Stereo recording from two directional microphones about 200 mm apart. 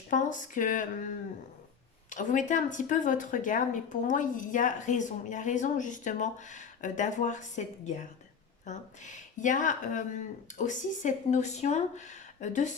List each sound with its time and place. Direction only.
0.1 s speech: 40° left (ahead or behind)